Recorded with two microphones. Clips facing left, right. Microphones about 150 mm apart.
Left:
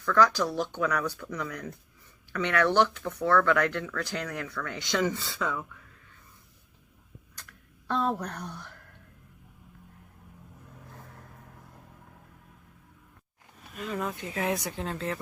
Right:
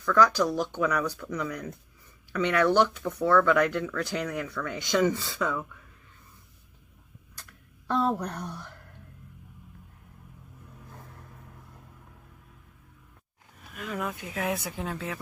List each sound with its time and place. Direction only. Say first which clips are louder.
0.1 s speech: right 1 dB; 15° right (ahead or behind)
5.4 s speech: right 2 dB; centre (ahead or behind)
7.9 s speech: right 2 dB; 5° right (ahead or behind)
13.7 s speech: left 1 dB; centre (ahead or behind)